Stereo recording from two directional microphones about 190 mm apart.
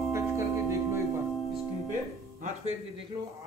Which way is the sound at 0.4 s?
15° right (ahead or behind).